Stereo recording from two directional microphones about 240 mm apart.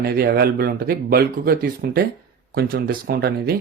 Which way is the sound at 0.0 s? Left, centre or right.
Right.